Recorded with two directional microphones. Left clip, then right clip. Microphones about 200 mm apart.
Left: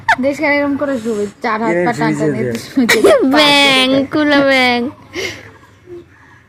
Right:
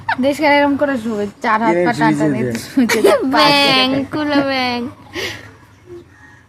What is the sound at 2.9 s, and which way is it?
Speech, 30° left (ahead or behind).